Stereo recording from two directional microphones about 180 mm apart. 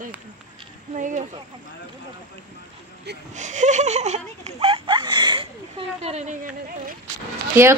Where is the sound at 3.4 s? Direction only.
40° right (ahead or behind).